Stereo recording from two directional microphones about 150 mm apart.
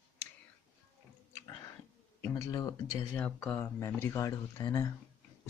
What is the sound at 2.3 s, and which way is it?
Speech, 25° left (ahead or behind).